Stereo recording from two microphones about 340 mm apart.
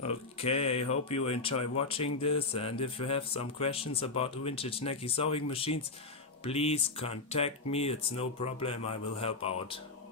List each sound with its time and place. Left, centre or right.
0.0 s speech: centre